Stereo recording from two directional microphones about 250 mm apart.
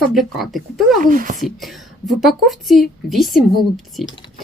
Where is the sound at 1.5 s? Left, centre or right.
Centre.